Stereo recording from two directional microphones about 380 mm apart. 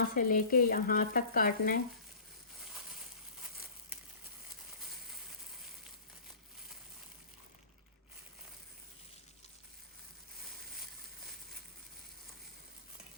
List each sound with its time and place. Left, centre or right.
0.1 s frying: left